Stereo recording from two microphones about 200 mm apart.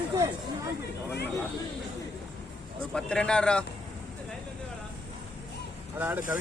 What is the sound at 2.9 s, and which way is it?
Speech, 5° left (ahead or behind).